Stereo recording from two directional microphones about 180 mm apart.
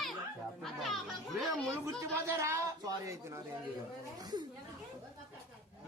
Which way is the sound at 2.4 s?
15° right (ahead or behind).